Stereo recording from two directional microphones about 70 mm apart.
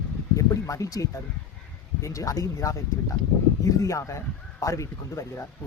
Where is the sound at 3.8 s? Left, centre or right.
Left.